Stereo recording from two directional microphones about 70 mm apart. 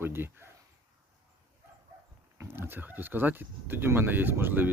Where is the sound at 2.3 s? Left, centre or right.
Right.